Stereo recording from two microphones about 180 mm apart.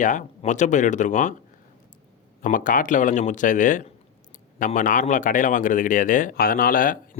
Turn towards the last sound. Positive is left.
turn(degrees=50)  # may be behind; listen again after turning